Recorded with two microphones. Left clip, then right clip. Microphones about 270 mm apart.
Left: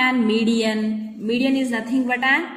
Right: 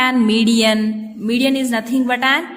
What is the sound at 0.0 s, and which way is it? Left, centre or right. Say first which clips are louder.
A woman's voice: right 3 dB; right.